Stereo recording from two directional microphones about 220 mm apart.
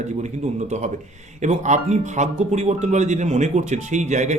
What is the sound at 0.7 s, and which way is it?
Speech, 30° right (ahead or behind).